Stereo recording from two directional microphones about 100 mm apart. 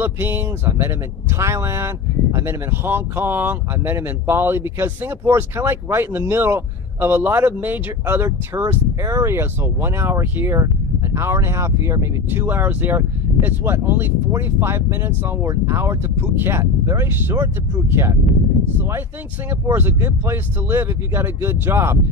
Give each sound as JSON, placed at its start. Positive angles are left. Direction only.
{"t": 0.0, "sound": "speech", "side_deg": -20}